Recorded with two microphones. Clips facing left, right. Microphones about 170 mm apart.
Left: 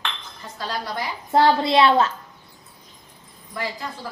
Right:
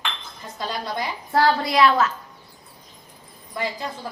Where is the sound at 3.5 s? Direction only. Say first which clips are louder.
Right 2 dB; 20° right (ahead or behind).